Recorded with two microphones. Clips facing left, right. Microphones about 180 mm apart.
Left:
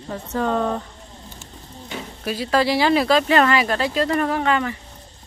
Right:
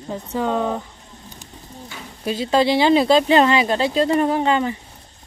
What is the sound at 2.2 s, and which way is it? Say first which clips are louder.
Speech: right 2 dB; 25° right (ahead or behind).